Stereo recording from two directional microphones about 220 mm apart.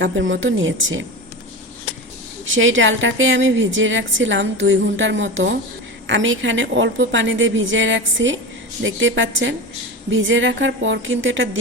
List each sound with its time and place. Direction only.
0.0 s a woman's voice: 60° right (ahead or behind)
2.6 s a woman's voice: 60° right (ahead or behind)